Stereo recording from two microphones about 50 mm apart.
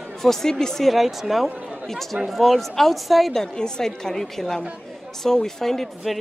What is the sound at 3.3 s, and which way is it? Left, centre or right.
A woman's voice, centre.